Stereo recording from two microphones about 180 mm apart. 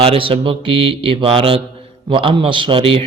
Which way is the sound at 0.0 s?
30° right (ahead or behind).